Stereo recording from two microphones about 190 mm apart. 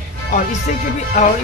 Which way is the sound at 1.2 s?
40° left (ahead or behind).